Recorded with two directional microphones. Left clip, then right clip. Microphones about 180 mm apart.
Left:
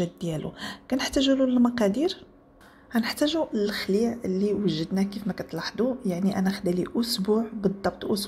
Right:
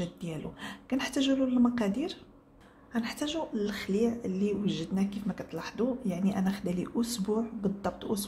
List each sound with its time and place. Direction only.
0.0 s a woman's voice: 25° left (ahead or behind)